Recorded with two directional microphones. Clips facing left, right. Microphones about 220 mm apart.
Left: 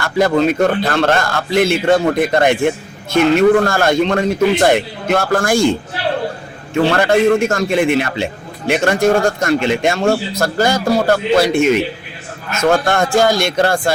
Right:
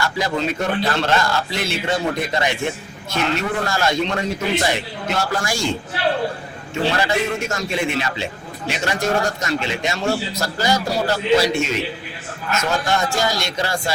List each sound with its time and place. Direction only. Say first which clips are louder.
0.0 s a man's voice: left 8 dB; 55° left (ahead or behind)
6.9 s a man's voice: left 13 dB; 55° left (ahead or behind)